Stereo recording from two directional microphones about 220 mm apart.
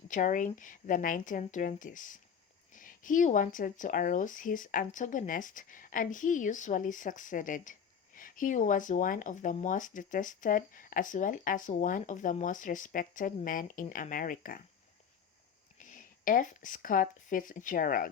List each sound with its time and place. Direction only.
0.1 s speech: 35° left (ahead or behind)
15.8 s speech: 35° left (ahead or behind)